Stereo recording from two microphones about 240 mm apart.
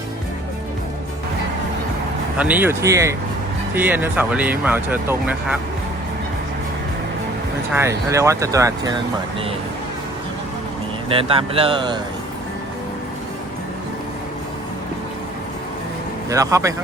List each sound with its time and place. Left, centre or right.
2.4 s speech: centre
7.8 s speech: centre
11.1 s speech: right
16.3 s speech: centre